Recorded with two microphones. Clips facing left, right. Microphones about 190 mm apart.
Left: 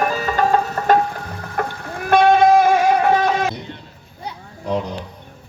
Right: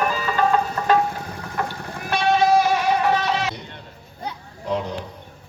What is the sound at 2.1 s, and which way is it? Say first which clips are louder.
Music: left 6 dB; 50° left (ahead or behind).